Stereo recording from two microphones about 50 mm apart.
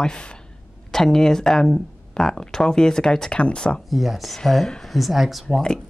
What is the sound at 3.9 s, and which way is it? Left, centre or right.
Speech, centre.